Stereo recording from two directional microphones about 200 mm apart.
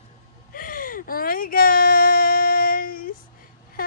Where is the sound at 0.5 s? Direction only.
45° left (ahead or behind).